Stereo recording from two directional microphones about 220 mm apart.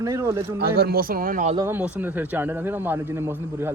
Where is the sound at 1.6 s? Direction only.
10° right (ahead or behind).